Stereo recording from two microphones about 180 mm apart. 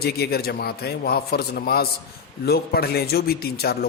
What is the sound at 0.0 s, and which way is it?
Speech, 60° left (ahead or behind).